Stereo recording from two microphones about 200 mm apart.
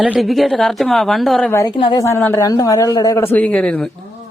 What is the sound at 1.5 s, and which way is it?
A woman's voice, 20° left (ahead or behind).